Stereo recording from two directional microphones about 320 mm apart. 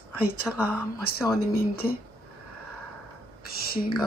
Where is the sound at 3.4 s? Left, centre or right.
Left.